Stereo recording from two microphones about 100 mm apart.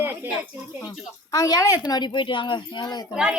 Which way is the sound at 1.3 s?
35° left (ahead or behind).